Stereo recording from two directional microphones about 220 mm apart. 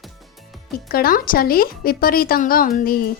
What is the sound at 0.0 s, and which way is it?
Music, centre (ahead or behind).